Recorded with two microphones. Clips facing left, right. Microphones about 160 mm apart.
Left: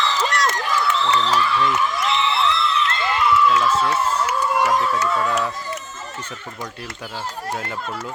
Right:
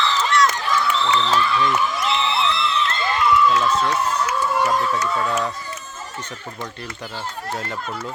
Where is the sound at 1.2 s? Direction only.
5° left (ahead or behind).